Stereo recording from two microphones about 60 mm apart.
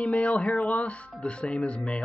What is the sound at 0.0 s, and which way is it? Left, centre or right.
Speech, centre.